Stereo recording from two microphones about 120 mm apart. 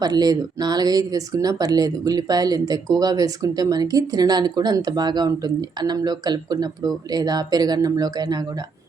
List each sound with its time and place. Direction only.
0.0 s speech: 35° right (ahead or behind)